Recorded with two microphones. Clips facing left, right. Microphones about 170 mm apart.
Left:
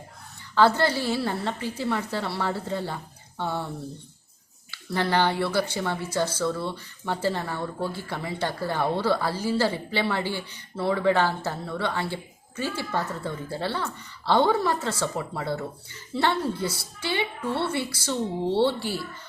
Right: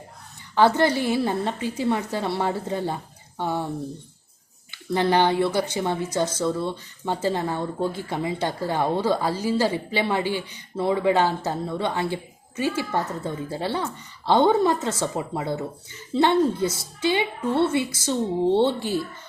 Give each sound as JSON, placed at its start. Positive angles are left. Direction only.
{"t": 0.5, "sound": "a woman's voice", "side_deg": -15}
{"t": 4.7, "sound": "speech", "side_deg": -20}